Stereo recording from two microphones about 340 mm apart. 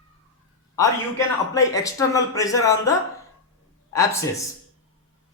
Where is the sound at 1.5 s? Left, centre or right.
Centre.